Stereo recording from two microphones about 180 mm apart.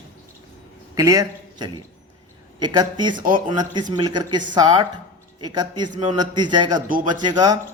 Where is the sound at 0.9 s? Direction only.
20° right (ahead or behind).